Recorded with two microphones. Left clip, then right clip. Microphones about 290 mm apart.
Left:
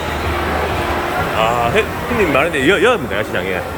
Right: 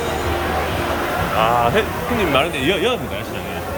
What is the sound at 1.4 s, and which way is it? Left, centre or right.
Speech, centre.